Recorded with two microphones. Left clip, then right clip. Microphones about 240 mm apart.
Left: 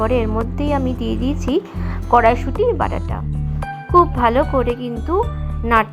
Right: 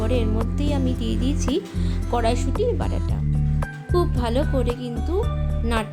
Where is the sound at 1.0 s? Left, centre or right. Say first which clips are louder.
Left 5 dB; right.